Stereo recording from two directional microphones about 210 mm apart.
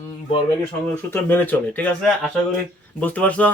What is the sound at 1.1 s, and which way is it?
Speech, 10° left (ahead or behind).